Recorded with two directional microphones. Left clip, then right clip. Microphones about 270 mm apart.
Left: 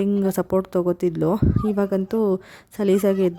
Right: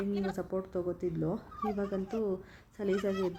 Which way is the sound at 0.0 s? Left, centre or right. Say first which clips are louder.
Left 13 dB; left.